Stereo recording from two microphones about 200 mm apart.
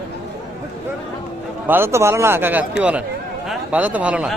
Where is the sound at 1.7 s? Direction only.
10° right (ahead or behind).